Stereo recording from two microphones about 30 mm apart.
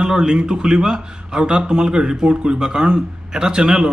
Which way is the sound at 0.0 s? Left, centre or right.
Right.